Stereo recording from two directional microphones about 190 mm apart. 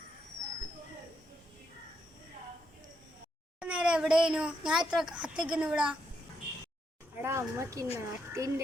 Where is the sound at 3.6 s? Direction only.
5° right (ahead or behind).